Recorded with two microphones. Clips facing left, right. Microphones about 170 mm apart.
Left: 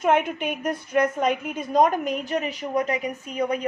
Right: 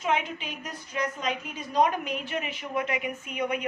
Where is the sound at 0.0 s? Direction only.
55° left (ahead or behind).